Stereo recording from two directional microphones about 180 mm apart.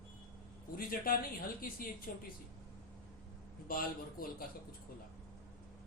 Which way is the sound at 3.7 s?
55° left (ahead or behind).